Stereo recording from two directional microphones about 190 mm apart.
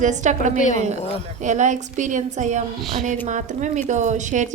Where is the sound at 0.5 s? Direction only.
40° left (ahead or behind).